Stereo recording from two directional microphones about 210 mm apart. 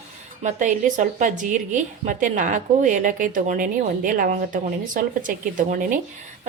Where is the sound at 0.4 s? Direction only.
35° right (ahead or behind).